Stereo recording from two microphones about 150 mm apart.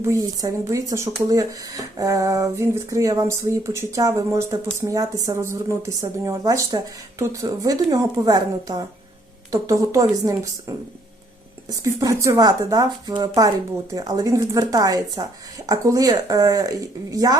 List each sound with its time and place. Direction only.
0.0 s speech: 20° right (ahead or behind)